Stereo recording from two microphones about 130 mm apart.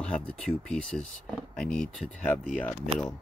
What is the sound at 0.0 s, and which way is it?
Speech, 10° left (ahead or behind).